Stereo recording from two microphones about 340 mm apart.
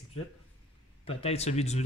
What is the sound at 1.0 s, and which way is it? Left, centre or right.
Speech, centre.